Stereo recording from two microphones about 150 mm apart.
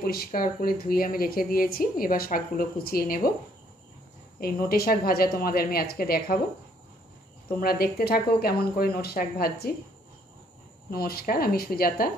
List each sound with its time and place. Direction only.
0.0 s speech: 85° left
4.4 s speech: 90° left
7.4 s speech: 90° left
10.9 s speech: 90° left